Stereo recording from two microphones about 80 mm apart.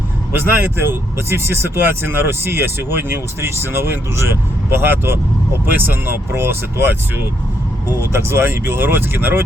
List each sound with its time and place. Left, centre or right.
0.3 s speech: right